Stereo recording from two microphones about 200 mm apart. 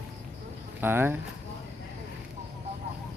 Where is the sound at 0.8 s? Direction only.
10° right (ahead or behind).